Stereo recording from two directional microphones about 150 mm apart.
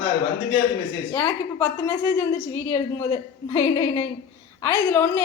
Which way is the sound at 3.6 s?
15° left (ahead or behind).